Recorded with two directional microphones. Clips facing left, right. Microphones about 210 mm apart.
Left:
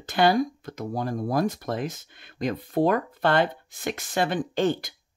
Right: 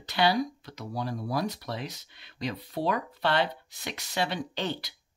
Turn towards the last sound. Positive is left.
turn(degrees=50)  # may be behind; listen again after turning